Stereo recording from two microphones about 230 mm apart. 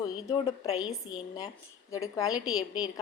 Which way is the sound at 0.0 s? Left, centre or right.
Centre.